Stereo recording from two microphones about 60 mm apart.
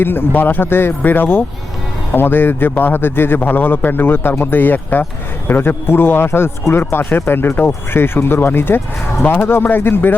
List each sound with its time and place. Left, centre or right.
0.0 s a man's voice: left